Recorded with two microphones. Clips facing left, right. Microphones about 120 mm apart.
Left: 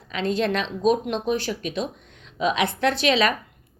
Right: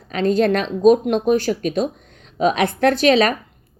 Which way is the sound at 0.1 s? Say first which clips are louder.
Right 7 dB; 45° right (ahead or behind).